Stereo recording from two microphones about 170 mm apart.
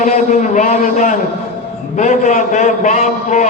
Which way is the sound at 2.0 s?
45° left (ahead or behind).